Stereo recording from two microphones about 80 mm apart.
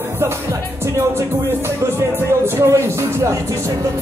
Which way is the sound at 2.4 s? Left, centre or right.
Right.